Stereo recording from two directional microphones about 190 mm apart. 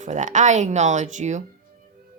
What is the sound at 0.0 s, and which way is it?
Speech, 40° right (ahead or behind).